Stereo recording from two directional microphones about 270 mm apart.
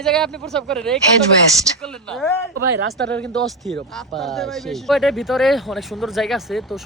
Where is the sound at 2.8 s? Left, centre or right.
Right.